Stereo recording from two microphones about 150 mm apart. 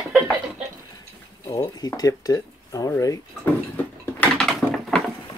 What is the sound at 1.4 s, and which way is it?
Speech, 25° left (ahead or behind).